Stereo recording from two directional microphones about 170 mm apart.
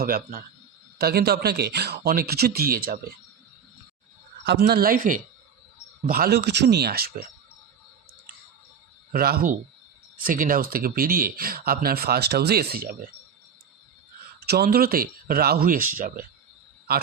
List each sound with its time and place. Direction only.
0.0 s speech: 60° right (ahead or behind)
4.4 s speech: 80° right; by 5.2 s 55° right (ahead or behind)
6.1 s speech: 65° right (ahead or behind)
9.1 s speech: 60° right (ahead or behind)
14.4 s speech: 70° right (ahead or behind)